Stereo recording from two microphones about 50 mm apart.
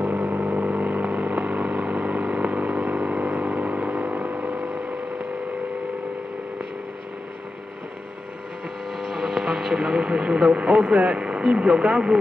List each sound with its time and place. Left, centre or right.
0.0 s vehicle: right
9.1 s speech: centre